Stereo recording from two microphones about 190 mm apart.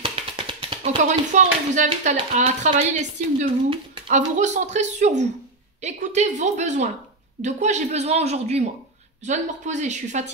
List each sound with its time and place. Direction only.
0.0 s music: 30° right (ahead or behind)
1.0 s speech: 40° right (ahead or behind)